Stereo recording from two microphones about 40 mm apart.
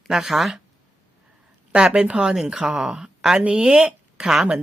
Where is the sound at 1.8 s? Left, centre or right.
Right.